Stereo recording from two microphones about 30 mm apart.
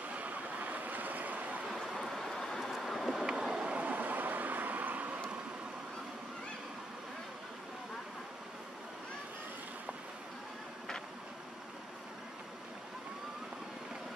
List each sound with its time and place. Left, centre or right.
0.1 s waves: right
2.0 s vehicle: centre
2.3 s vehicle: centre
2.7 s vehicle: centre
3.3 s vehicle: right
3.7 s vehicle: right